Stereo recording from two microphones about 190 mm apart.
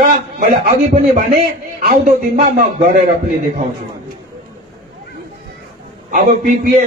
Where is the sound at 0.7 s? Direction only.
40° right (ahead or behind).